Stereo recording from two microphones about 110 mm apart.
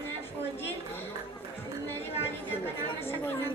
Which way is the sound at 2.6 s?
20° left (ahead or behind).